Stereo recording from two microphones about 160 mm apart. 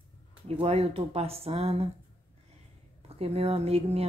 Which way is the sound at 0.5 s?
40° right (ahead or behind).